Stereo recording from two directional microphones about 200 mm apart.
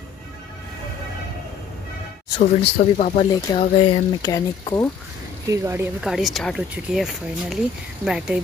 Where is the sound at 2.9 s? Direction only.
35° left (ahead or behind); by 4.9 s 15° left (ahead or behind).